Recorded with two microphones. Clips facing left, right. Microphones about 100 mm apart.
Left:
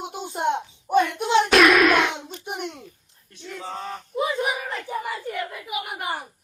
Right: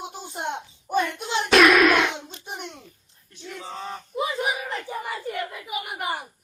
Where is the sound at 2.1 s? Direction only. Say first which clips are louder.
Left 4 dB; 15° left (ahead or behind).